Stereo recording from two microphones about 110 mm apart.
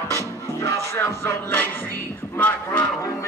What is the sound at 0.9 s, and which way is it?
Music, 20° left (ahead or behind).